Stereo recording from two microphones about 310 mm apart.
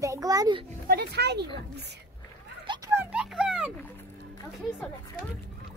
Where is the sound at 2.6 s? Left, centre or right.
Centre.